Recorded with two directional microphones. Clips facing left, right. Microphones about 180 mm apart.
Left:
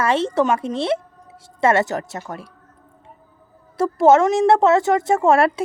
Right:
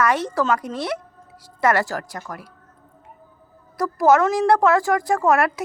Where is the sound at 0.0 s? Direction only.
25° left (ahead or behind).